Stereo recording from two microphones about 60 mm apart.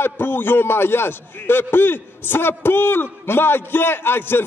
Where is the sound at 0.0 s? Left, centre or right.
Left.